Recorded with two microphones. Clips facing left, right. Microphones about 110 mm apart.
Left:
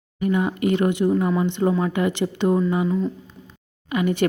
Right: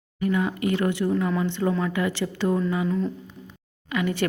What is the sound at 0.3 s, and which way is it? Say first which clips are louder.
A woman's voice: left 3 dB; 20° left (ahead or behind).